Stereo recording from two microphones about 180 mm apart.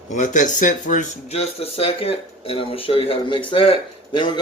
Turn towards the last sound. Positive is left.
turn(degrees=25)  # may be behind; listen again after turning